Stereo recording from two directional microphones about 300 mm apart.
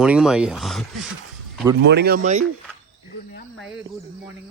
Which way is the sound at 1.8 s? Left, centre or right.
Right.